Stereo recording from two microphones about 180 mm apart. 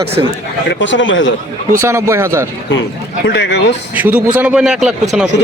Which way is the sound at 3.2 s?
70° left (ahead or behind).